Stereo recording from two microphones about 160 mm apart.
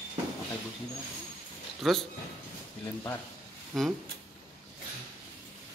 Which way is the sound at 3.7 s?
Centre (ahead or behind).